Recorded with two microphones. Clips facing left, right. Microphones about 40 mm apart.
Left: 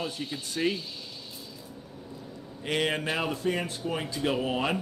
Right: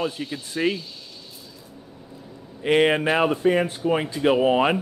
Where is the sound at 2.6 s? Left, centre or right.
Right.